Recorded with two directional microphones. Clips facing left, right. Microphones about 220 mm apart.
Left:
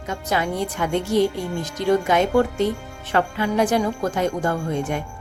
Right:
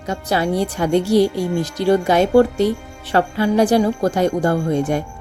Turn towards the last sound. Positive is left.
turn(degrees=-35)  # may be behind; listen again after turning